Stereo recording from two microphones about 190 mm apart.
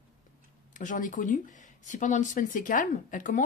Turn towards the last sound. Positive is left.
turn(degrees=45)  # may be behind; listen again after turning